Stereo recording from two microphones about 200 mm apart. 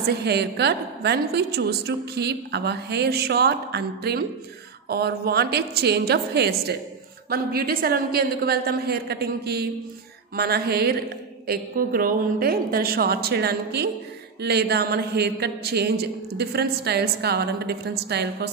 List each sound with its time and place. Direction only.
0.1 s a woman's voice: 55° right (ahead or behind)